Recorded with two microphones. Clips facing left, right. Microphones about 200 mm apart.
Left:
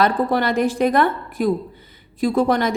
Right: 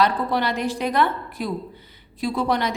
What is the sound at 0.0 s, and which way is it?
A woman's voice, 50° left (ahead or behind).